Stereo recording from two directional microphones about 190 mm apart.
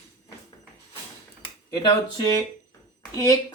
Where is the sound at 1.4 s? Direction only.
20° left (ahead or behind).